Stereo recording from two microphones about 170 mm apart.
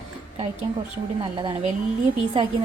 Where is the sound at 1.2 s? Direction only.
30° right (ahead or behind).